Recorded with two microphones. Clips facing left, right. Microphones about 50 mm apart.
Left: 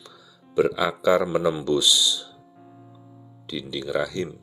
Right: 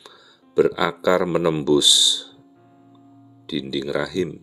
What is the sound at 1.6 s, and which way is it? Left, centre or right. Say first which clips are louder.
Speech: right 4 dB; right.